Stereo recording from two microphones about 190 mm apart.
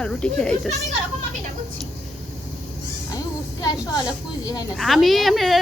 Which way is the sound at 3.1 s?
20° left (ahead or behind).